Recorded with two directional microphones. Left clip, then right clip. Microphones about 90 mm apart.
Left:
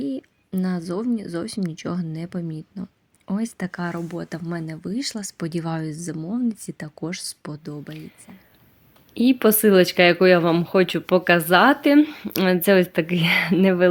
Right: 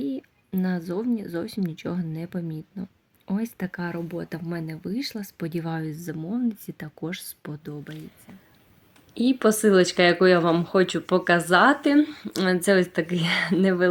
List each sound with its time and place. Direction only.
0.6 s a woman's voice: 25° left (ahead or behind)
6.1 s speech: 10° left (ahead or behind)
6.5 s speech: 20° left (ahead or behind)
9.1 s speech: 50° left (ahead or behind)
11.9 s speech: 90° left; by 13.8 s 55° left (ahead or behind)